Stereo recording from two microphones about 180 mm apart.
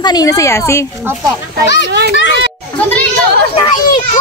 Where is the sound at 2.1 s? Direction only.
85° left.